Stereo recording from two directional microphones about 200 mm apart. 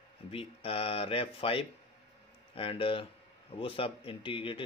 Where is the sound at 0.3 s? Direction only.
30° left (ahead or behind).